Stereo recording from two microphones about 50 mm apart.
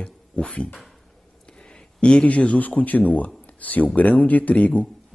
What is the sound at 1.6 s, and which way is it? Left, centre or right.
A man's voice, centre.